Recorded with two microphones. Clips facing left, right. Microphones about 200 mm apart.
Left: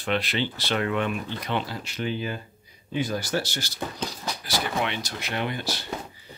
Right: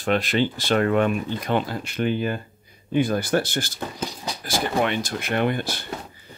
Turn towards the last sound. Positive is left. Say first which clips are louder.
# right 6 dB
turn(degrees=-55)  # may be behind; listen again after turning